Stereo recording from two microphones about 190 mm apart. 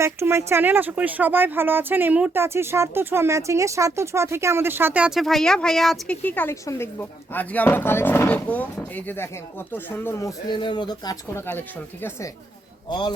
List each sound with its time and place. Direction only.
0.0 s speech: 15° right (ahead or behind); by 10.3 s 10° left (ahead or behind)
10.5 s speech: 25° left (ahead or behind)
12.9 s speech: 20° left (ahead or behind)